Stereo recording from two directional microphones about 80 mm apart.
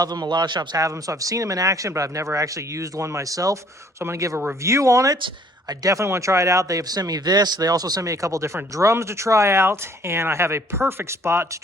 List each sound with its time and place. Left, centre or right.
0.0 s a man's voice: right
0.8 s speech: right